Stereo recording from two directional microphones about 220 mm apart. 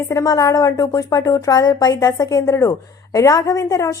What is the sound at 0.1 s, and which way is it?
A woman's voice, 15° left (ahead or behind).